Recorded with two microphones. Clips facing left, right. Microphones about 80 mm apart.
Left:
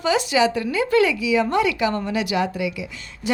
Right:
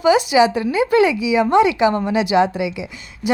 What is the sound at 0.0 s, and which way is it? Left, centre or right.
A woman's voice, centre.